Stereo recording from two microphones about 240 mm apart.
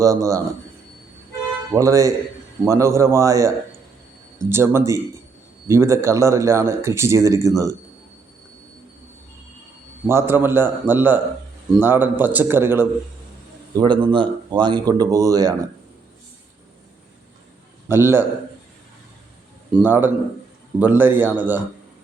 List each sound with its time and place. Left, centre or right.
0.0 s speech: centre
1.7 s speech: centre
10.1 s speech: centre
17.8 s speech: centre
19.7 s speech: centre